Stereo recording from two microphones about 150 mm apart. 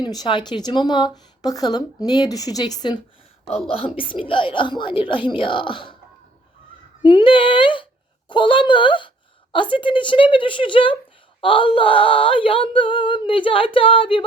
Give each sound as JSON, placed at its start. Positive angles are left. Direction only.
{"t": 0.0, "sound": "speech", "side_deg": 30}
{"t": 3.7, "sound": "female singing", "side_deg": 40}
{"t": 7.0, "sound": "female singing", "side_deg": 30}